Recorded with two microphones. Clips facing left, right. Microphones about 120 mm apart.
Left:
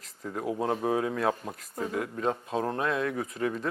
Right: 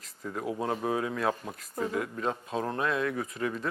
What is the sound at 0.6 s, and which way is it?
Speech, 25° left (ahead or behind).